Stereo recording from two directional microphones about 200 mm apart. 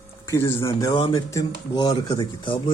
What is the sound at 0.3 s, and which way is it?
Speech, 15° left (ahead or behind).